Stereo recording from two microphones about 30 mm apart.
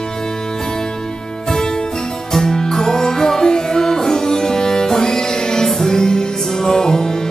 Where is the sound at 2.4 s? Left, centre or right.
Left.